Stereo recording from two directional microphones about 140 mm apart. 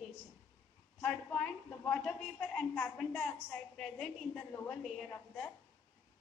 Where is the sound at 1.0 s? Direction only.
10° left (ahead or behind).